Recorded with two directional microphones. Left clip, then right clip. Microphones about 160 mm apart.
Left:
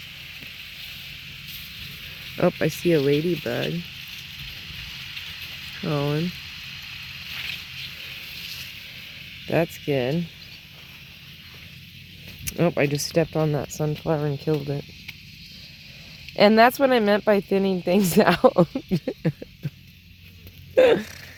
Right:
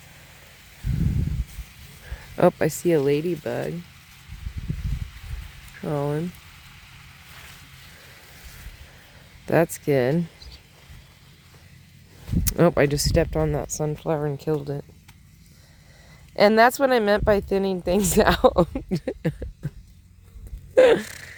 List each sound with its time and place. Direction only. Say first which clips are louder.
2.4 s speech: right 3 dB; 35° right (ahead or behind)
5.8 s speech: even; 25° right (ahead or behind)
9.5 s speech: right 3 dB; 55° right (ahead or behind)
12.5 s speech: right 3 dB; 60° right (ahead or behind)
13.1 s speech: left 2 dB; 30° right (ahead or behind)
16.3 s speech: even; 20° right (ahead or behind)
20.7 s a sound: right 1 dB; 35° right (ahead or behind)